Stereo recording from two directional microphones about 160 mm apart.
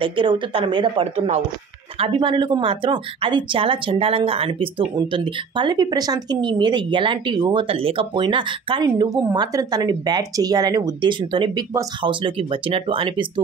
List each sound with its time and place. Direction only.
0.0 s speech: 30° right (ahead or behind)
2.0 s speech: 30° right (ahead or behind)